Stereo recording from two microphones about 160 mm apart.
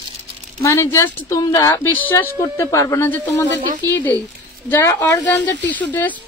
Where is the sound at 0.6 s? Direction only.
20° left (ahead or behind).